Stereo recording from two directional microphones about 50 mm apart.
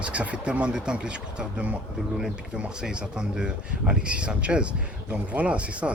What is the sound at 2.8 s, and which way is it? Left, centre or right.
Speech, centre.